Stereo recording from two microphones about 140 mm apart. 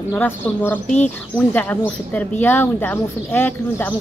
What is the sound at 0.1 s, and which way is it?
A man's voice, 15° left (ahead or behind).